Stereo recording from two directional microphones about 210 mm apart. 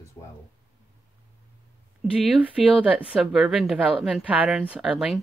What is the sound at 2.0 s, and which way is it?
A woman's voice, 5° right (ahead or behind).